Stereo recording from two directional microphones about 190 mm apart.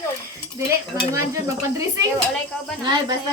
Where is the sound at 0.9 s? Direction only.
15° right (ahead or behind).